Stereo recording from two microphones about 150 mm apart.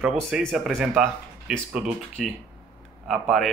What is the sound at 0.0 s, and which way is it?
Speech, 5° right (ahead or behind).